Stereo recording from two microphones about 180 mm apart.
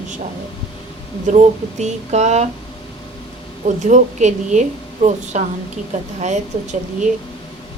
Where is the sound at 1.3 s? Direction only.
40° right (ahead or behind).